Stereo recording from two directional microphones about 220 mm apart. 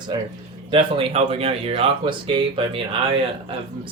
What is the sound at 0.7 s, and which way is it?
Speech, 25° right (ahead or behind).